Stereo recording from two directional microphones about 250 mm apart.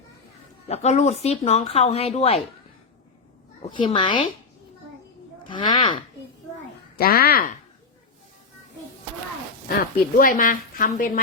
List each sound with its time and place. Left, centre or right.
0.7 s speech: left
3.7 s speech: centre
5.4 s speech: centre
6.9 s a woman's voice: left
10.2 s a woman's voice: left